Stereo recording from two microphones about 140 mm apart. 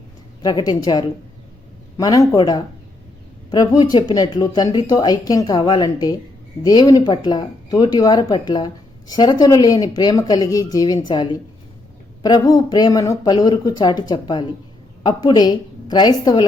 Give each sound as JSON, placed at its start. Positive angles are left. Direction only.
{"t": 0.4, "sound": "speech", "side_deg": 30}